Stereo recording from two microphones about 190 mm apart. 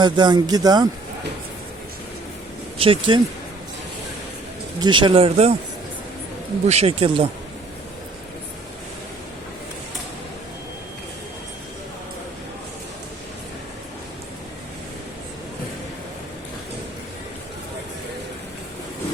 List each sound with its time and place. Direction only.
0.0 s speech: 20° right (ahead or behind)
2.7 s speech: 30° right (ahead or behind)
4.8 s speech: 25° right (ahead or behind)
6.7 s speech: 35° right (ahead or behind)